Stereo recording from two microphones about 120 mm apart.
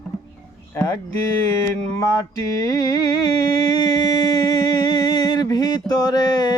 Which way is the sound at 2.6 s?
30° left (ahead or behind).